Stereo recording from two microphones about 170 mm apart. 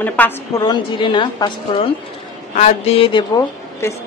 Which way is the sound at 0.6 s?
25° left (ahead or behind).